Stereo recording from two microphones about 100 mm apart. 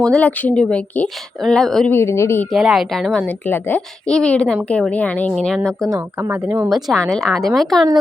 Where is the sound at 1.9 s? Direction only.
25° left (ahead or behind).